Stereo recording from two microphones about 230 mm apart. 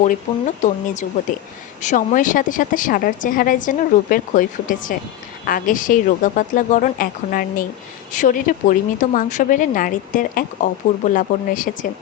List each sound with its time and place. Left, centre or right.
0.0 s a woman's voice: left